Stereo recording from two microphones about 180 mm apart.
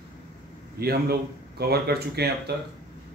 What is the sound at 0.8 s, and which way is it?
Speech, 60° right (ahead or behind).